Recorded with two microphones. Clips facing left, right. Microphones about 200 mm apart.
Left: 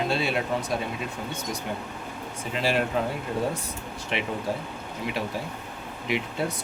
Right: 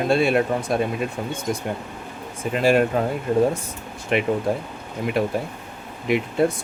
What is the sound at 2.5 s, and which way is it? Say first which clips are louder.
Speech: right 7 dB; 50° right (ahead or behind).